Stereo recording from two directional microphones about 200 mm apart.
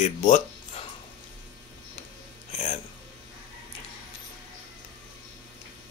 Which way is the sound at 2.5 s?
35° left (ahead or behind).